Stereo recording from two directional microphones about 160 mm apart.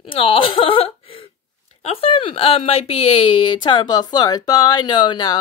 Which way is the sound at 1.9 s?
35° left (ahead or behind).